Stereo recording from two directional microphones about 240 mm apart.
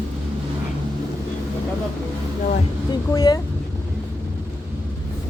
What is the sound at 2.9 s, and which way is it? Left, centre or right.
Speech, centre.